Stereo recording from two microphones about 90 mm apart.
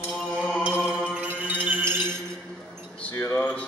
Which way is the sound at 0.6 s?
15° right (ahead or behind).